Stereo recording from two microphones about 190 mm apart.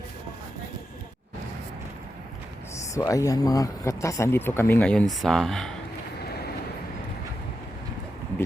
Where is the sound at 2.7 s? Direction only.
15° left (ahead or behind).